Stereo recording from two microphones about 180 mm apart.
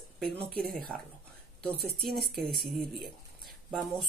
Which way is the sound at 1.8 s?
60° right (ahead or behind).